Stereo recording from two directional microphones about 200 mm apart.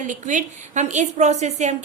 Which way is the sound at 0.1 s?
40° right (ahead or behind).